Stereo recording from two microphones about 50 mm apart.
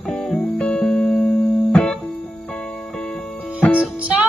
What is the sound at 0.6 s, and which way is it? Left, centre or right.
Music, left.